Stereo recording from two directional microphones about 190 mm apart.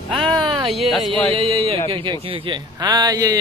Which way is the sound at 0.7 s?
Centre (ahead or behind).